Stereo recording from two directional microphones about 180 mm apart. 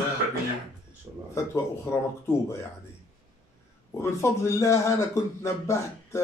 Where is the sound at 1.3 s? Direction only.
15° left (ahead or behind).